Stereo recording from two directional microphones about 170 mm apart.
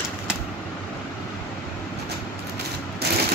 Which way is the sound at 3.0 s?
70° right (ahead or behind).